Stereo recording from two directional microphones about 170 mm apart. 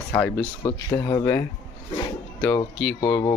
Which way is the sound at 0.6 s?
20° left (ahead or behind).